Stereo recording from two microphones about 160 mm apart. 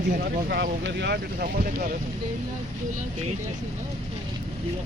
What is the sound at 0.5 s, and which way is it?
Speech, 90° right.